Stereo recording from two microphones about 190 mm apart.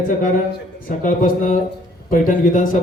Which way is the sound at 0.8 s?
45° left (ahead or behind).